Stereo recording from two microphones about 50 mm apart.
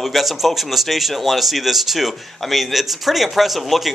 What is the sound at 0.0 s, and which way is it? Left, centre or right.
Speech, centre.